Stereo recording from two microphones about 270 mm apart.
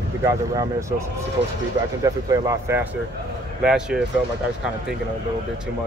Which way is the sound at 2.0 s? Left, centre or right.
Centre.